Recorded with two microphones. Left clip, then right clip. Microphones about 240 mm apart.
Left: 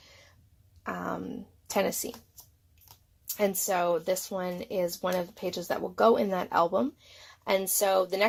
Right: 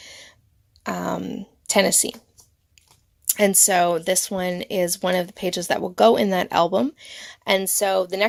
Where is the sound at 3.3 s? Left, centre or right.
Right.